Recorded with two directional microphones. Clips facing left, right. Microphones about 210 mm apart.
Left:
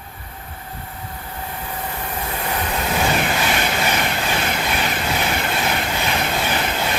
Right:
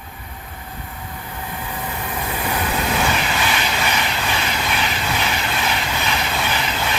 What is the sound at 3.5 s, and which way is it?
Vehicle, 50° left (ahead or behind).